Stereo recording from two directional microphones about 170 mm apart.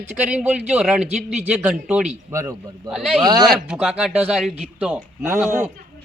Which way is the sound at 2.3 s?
15° right (ahead or behind).